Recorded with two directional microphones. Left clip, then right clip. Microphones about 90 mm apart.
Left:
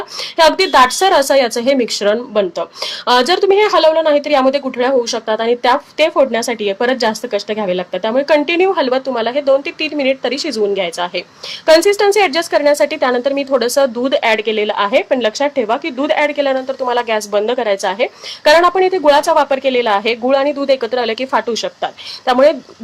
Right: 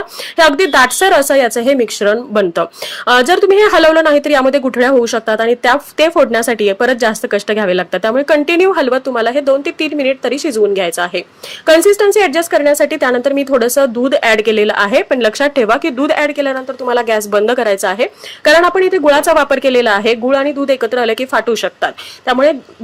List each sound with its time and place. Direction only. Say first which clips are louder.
0.3 s a woman's voice: right 1 dB; 30° right (ahead or behind)